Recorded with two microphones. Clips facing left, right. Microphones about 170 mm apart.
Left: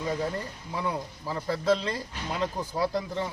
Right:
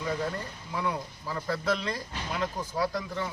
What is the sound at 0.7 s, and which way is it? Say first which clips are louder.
Speech: even; 25° left (ahead or behind).